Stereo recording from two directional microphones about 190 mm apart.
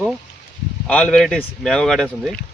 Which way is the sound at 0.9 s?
5° left (ahead or behind).